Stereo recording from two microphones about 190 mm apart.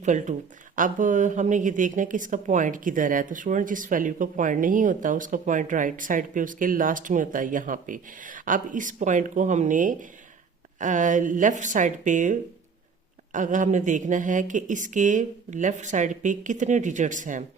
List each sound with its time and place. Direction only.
0.0 s a woman's voice: 40° right (ahead or behind)